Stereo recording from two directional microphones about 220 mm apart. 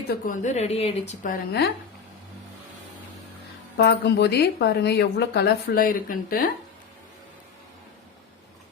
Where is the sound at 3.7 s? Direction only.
50° left (ahead or behind).